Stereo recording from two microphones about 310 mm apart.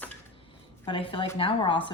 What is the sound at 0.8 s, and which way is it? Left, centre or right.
Speech, centre.